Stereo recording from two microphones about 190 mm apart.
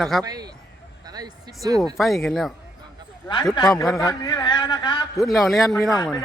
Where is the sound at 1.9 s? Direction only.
Centre (ahead or behind).